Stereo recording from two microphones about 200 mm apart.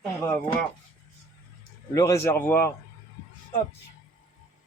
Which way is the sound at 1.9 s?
15° left (ahead or behind).